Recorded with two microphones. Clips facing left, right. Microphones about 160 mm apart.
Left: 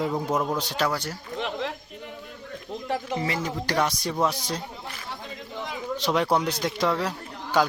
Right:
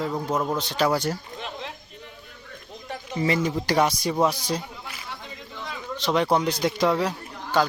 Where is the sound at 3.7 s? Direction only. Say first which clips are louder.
Right 3 dB; 5° right (ahead or behind).